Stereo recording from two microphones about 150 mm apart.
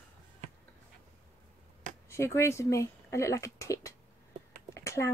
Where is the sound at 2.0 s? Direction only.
20° left (ahead or behind).